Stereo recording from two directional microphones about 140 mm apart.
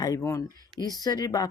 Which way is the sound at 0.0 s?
25° left (ahead or behind).